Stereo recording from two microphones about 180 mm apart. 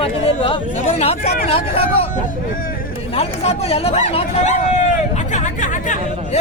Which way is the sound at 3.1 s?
35° left (ahead or behind).